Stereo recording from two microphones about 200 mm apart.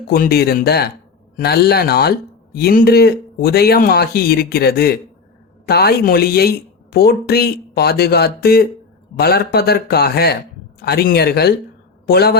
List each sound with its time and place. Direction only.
0.1 s speech: 50° left (ahead or behind)